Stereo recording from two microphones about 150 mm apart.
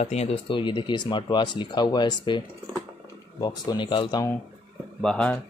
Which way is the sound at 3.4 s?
30° left (ahead or behind).